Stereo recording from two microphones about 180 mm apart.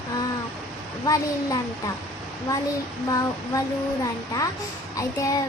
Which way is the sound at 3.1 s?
20° left (ahead or behind).